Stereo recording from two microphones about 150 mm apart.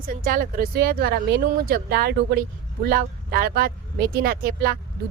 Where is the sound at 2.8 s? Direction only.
75° right (ahead or behind).